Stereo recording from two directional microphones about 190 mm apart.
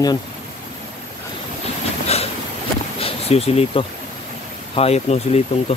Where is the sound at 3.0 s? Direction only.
30° left (ahead or behind).